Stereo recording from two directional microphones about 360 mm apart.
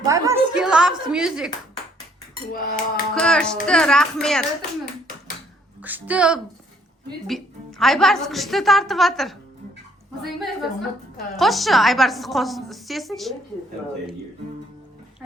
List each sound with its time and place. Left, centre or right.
0.0 s a sound: centre
2.5 s cutlery: left
3.2 s a woman's voice: centre
5.8 s a woman's voice: centre